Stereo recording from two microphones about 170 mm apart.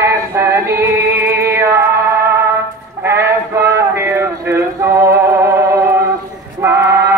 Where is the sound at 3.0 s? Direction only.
15° right (ahead or behind).